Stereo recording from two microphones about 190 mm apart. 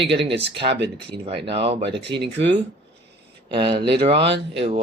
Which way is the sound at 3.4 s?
25° right (ahead or behind).